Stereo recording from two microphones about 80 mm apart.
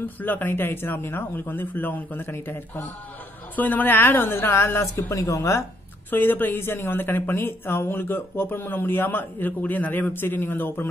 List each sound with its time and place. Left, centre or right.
0.2 s a woman's voice: left
6.0 s a woman's voice: left